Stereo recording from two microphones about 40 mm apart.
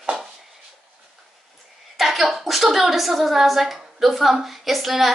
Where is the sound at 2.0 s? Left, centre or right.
Centre.